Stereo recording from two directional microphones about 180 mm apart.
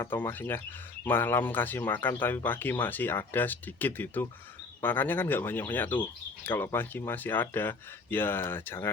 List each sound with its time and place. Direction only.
0.0 s speech: 10° left (ahead or behind)